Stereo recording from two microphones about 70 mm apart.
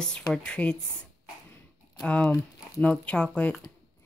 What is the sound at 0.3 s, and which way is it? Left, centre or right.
Speech, centre.